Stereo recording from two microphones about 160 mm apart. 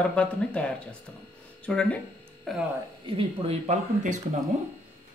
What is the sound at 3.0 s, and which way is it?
Speech, 35° right (ahead or behind).